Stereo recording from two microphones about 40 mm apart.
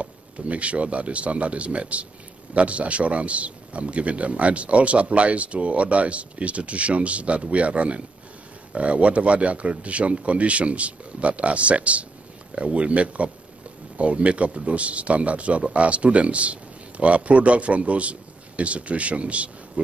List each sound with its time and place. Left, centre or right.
0.0 s a man's voice: right